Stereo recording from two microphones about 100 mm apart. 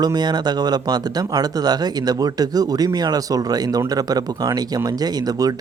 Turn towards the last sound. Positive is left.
turn(degrees=-40)  # may be behind; listen again after turning